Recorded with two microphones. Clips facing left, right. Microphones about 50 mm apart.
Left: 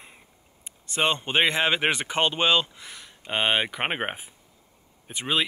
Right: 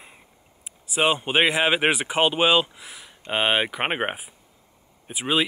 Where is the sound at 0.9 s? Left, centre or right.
Centre.